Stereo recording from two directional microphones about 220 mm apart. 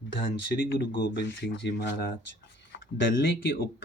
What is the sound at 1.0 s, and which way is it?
Speech, 50° left (ahead or behind).